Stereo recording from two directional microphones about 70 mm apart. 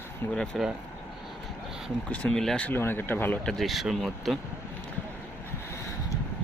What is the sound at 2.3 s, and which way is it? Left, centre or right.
Speech, centre.